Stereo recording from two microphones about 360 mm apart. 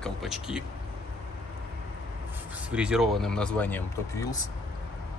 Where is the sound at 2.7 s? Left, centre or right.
Centre.